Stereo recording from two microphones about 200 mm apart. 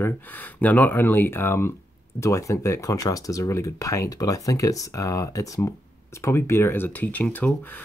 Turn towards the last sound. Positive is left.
turn(degrees=5)  # may be behind; listen again after turning